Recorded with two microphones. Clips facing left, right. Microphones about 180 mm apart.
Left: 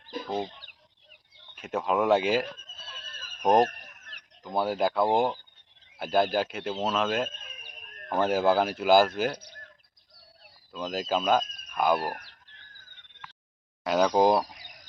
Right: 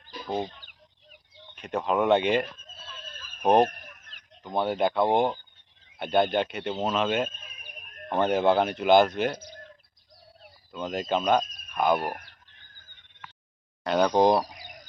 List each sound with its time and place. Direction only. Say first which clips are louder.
0.3 s speech: right 2 dB; centre (ahead or behind)
1.5 s speech: right 1 dB; 5° left (ahead or behind)
10.7 s speech: right 1 dB; centre (ahead or behind)
11.9 s speech: right 1 dB; 15° right (ahead or behind)
13.8 s speech: right 1 dB; 5° left (ahead or behind)